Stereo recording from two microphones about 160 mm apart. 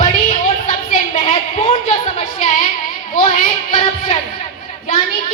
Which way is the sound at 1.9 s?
50° left (ahead or behind).